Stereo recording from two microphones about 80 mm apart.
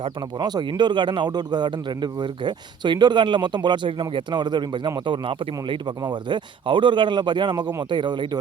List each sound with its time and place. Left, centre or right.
0.0 s a man's voice: right